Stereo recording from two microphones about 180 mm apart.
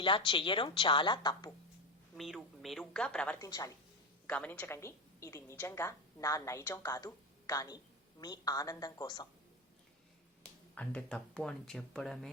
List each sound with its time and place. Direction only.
0.0 s a woman's voice: 30° left (ahead or behind)
2.1 s speech: centre (ahead or behind)
3.4 s a woman's voice: 20° left (ahead or behind)
4.3 s a woman's voice: 10° left (ahead or behind)
10.8 s speech: 5° left (ahead or behind)